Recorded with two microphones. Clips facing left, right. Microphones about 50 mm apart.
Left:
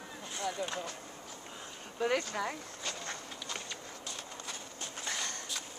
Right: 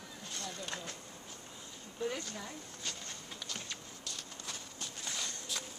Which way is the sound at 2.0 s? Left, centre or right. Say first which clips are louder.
Left 7 dB; left.